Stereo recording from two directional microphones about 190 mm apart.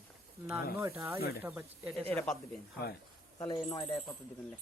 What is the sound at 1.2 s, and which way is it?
Speech, 55° left (ahead or behind).